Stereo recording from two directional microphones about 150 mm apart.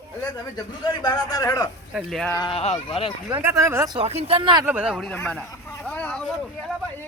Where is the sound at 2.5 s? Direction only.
45° left (ahead or behind).